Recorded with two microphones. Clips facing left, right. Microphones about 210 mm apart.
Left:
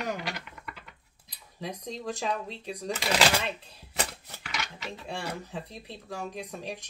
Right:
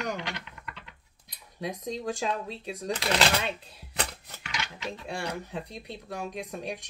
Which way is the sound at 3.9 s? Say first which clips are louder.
Left 1 dB; centre (ahead or behind).